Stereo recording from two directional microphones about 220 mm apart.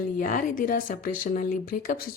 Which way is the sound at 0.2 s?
35° left (ahead or behind).